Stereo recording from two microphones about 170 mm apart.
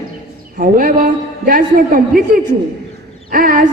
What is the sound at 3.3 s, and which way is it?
Speech, 55° right (ahead or behind).